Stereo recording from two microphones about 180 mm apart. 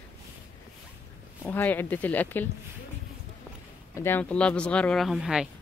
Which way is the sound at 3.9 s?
10° left (ahead or behind).